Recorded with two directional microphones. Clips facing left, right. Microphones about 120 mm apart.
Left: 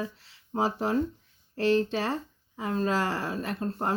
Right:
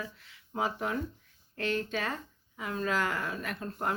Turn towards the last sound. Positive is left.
turn(degrees=30)  # may be behind; listen again after turning